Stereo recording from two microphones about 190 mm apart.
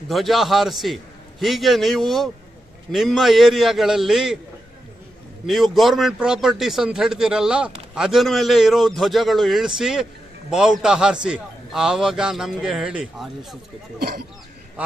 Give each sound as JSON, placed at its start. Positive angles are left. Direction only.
{"t": 0.1, "sound": "speech", "side_deg": 0}
{"t": 5.5, "sound": "speech", "side_deg": 0}
{"t": 13.9, "sound": "speech", "side_deg": -50}